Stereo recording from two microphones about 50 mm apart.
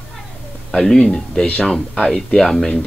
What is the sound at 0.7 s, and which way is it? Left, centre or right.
Speech, centre.